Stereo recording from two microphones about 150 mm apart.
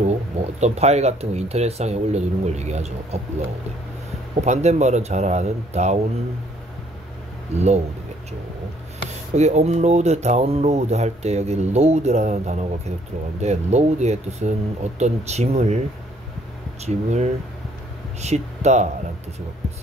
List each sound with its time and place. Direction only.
0.0 s speech: 50° right (ahead or behind)
4.4 s speech: 45° right (ahead or behind)
7.5 s speech: 45° right (ahead or behind)
9.3 s speech: 50° right (ahead or behind)
16.8 s speech: 50° right (ahead or behind)